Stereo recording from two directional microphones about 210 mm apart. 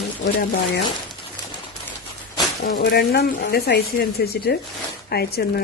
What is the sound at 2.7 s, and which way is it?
Speech, 50° left (ahead or behind).